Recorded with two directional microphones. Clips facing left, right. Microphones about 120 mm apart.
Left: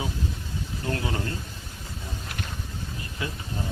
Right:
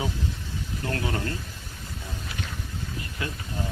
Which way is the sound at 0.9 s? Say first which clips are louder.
Even; 25° left (ahead or behind).